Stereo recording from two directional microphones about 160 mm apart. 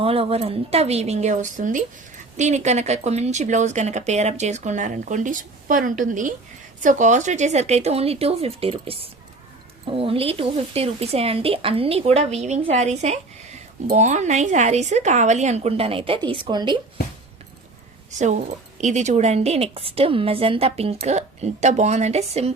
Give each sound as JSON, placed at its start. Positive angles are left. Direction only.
{"t": 0.0, "sound": "a woman's voice", "side_deg": -35}
{"t": 18.8, "sound": "a woman's voice", "side_deg": -45}